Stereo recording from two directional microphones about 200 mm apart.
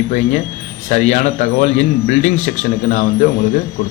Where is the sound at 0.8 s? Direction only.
35° left (ahead or behind).